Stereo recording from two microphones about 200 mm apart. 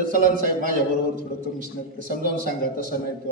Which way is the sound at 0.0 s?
40° right (ahead or behind).